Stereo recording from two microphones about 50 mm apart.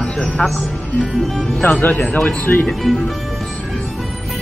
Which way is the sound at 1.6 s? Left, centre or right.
Left.